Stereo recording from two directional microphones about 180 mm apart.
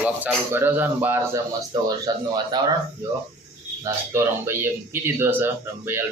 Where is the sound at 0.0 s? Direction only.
10° right (ahead or behind).